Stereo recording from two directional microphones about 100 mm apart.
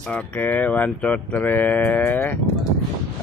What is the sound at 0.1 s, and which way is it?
Speech, 15° left (ahead or behind).